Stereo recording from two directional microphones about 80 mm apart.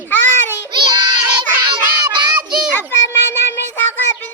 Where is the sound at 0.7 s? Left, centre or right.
Right.